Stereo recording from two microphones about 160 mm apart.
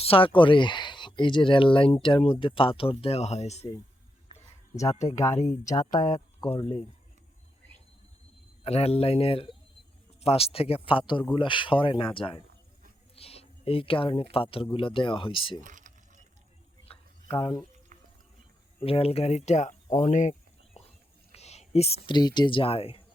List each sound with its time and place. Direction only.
0.0 s speech: 35° left (ahead or behind)
5.0 s speech: 20° left (ahead or behind)
8.6 s speech: 40° left (ahead or behind)
15.6 s a sound: 55° right (ahead or behind)
17.2 s speech: 20° left (ahead or behind)
17.9 s music: 55° right (ahead or behind)
18.8 s speech: 35° left (ahead or behind)
21.3 s speech: 45° left (ahead or behind)